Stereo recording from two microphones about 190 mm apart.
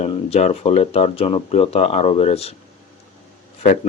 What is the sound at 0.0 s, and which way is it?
Speech, 35° left (ahead or behind).